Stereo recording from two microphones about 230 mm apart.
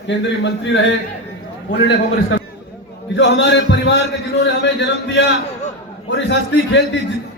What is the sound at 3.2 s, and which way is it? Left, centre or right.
A man's voice, left.